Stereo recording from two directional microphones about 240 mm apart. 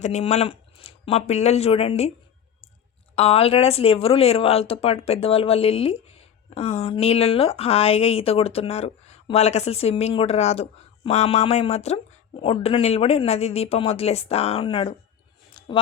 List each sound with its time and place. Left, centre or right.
0.0 s speech: left
3.2 s speech: left
15.6 s a sound: centre